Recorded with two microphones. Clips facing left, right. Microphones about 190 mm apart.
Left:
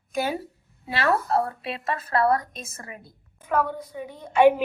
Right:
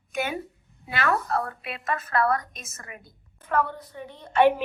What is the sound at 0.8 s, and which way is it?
A woman's voice, 30° left (ahead or behind).